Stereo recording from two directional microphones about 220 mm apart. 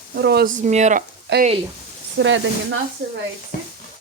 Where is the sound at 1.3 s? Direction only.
55° right (ahead or behind).